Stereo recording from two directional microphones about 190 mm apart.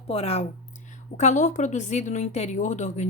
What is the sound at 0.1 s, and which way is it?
A woman's voice, 30° left (ahead or behind).